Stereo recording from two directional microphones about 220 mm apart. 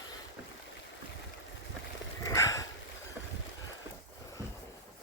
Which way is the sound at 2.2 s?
15° left (ahead or behind).